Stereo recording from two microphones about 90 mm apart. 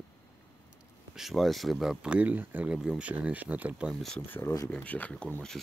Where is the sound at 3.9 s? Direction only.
Centre (ahead or behind).